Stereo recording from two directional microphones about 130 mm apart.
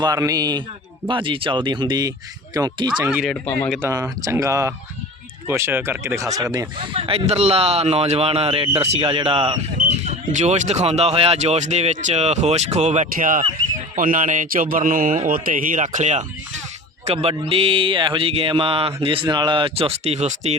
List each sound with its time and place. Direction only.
0.0 s speech: 25° right (ahead or behind)
3.0 s speech: 15° right (ahead or behind)
3.4 s speech: 15° left (ahead or behind)
3.8 s speech: 20° right (ahead or behind)
6.7 s mantra: 45° right (ahead or behind)
9.7 s speech: 60° right (ahead or behind)
17.1 s mantra: 50° right (ahead or behind)